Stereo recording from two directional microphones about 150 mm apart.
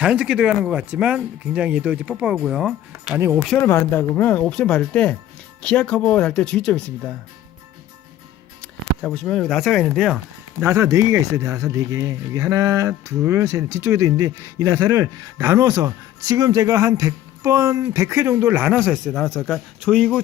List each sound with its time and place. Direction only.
0.0 s speech: 5° right (ahead or behind)
3.2 s speech: 15° right (ahead or behind)
3.6 s speech: 15° left (ahead or behind)
8.6 s a man's voice: 5° left (ahead or behind)
10.6 s a man's voice: 15° right (ahead or behind); by 20.2 s centre (ahead or behind)